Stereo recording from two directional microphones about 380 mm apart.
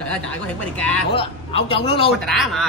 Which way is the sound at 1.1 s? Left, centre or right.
Centre.